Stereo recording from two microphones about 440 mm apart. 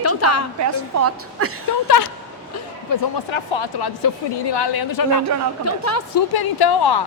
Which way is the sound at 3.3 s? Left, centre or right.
Left.